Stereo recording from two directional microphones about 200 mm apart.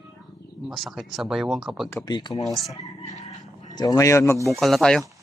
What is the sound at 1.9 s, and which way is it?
Speech, 10° left (ahead or behind).